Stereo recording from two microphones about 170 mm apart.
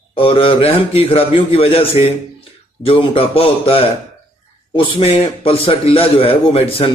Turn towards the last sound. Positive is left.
turn(degrees=35)  # may be behind; listen again after turning